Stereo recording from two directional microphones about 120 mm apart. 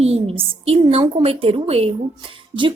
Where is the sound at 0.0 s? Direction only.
55° right (ahead or behind).